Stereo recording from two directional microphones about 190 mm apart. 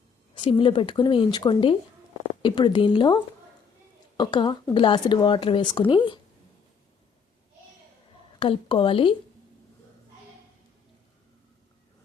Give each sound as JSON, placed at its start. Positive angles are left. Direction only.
{"t": 0.3, "sound": "speech", "side_deg": 25}
{"t": 4.2, "sound": "speech", "side_deg": 25}
{"t": 8.4, "sound": "speech", "side_deg": 30}